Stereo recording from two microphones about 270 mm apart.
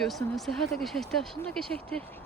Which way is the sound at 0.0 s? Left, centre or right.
Centre.